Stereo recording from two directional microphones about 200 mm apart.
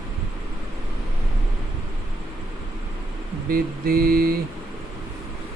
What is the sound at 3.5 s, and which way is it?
Mantra, 45° right (ahead or behind).